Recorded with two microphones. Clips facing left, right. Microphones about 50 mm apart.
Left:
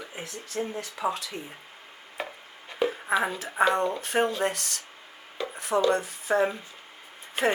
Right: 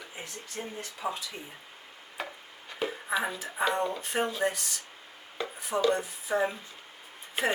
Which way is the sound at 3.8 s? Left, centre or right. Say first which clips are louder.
Left 4 dB; left.